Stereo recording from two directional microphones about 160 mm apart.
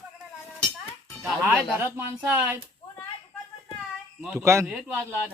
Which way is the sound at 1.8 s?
15° right (ahead or behind).